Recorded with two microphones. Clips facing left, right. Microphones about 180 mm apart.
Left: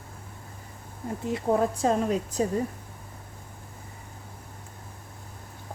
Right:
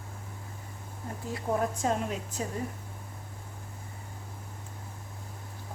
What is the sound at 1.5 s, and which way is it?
Speech, 35° left (ahead or behind).